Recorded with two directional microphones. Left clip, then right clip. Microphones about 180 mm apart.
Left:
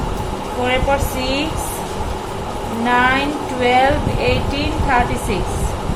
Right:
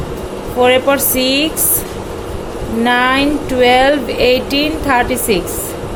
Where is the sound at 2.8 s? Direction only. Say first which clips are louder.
Right 3 dB; 65° right (ahead or behind).